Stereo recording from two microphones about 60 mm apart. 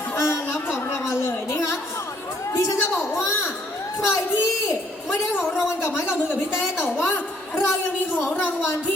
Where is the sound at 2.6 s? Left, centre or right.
Left.